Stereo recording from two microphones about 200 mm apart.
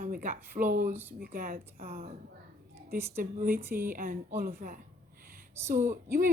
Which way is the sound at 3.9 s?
45° right (ahead or behind).